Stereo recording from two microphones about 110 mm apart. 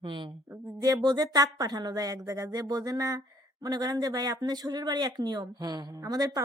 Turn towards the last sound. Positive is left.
turn(degrees=-35)  # may be behind; listen again after turning